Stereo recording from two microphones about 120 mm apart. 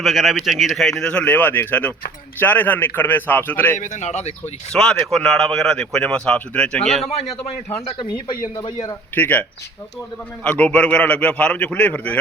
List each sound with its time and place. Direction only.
0.0 s a man's voice: centre (ahead or behind); by 3.8 s 15° left (ahead or behind)
3.8 s speech: 90° left; by 4.5 s 65° left (ahead or behind)
4.7 s speech: 5° left (ahead or behind)
7.0 s a man's voice: 60° left (ahead or behind)
7.9 s speech: 45° left (ahead or behind)
9.1 s a man's voice: 15° left (ahead or behind)